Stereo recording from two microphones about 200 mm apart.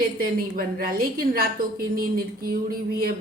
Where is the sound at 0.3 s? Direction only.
45° right (ahead or behind).